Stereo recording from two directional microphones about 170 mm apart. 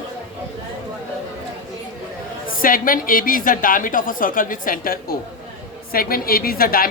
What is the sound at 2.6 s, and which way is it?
A woman's voice, 55° left (ahead or behind).